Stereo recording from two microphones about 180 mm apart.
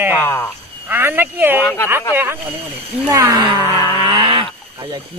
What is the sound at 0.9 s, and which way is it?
Speech, 10° right (ahead or behind).